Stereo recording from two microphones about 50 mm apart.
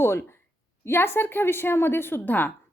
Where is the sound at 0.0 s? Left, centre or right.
Left.